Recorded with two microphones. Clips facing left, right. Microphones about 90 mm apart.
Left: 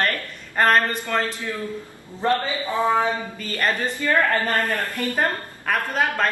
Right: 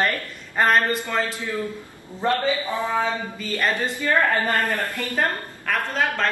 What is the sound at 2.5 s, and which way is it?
Speech, 20° left (ahead or behind).